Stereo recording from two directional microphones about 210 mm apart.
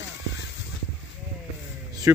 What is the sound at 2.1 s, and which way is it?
Speech, 10° right (ahead or behind).